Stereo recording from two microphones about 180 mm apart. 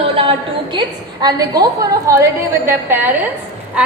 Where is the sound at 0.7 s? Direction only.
25° right (ahead or behind).